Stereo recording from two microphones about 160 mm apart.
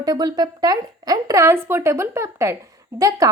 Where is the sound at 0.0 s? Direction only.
25° right (ahead or behind).